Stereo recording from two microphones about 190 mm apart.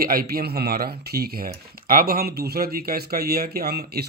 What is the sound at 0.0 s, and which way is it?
Speech, 50° right (ahead or behind).